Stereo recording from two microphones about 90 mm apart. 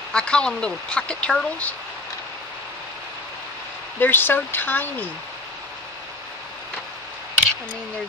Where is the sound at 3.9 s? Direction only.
25° left (ahead or behind).